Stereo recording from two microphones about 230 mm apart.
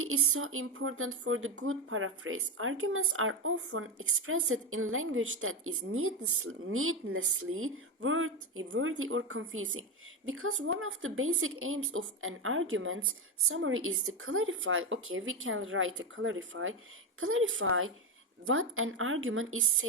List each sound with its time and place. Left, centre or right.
0.0 s speech: right